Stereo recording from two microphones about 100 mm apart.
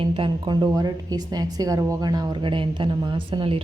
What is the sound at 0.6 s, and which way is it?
Speech, 40° right (ahead or behind).